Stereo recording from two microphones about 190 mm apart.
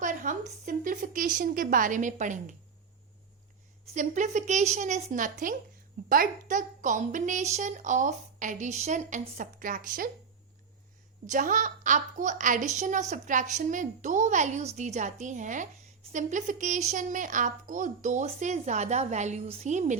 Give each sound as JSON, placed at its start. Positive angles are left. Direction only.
{"t": 0.0, "sound": "a woman's voice", "side_deg": -40}
{"t": 3.9, "sound": "a woman's voice", "side_deg": -40}
{"t": 11.3, "sound": "a woman's voice", "side_deg": -45}